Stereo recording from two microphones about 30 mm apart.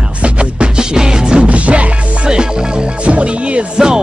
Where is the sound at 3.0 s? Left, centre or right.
Right.